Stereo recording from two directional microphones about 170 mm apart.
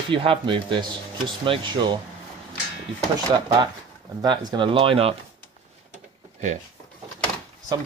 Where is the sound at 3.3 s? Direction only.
25° right (ahead or behind).